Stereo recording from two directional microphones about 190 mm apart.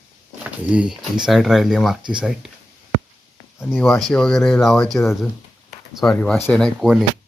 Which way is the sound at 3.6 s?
5° right (ahead or behind).